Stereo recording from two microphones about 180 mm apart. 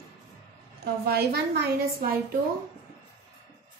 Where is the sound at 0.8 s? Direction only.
65° right (ahead or behind).